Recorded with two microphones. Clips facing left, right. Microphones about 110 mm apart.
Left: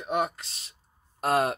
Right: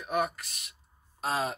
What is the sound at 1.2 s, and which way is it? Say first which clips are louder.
Speech: left 6 dB; 55° left (ahead or behind).